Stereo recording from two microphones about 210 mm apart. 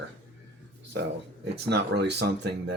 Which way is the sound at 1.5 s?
50° right (ahead or behind).